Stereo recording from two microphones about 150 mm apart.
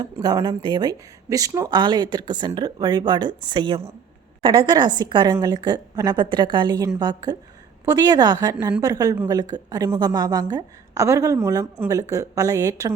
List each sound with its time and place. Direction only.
0.0 s a woman's voice: 25° right (ahead or behind)